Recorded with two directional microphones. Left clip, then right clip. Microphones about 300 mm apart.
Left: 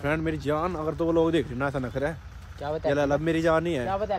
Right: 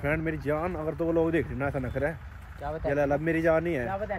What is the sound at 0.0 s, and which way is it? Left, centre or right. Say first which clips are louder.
Speech: left 2 dB; centre.